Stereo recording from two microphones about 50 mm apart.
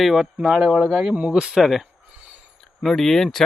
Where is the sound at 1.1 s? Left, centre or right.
Right.